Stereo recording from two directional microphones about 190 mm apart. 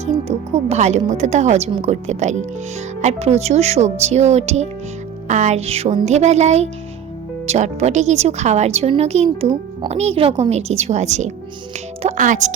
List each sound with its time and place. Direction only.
0.0 s speech: 35° right (ahead or behind)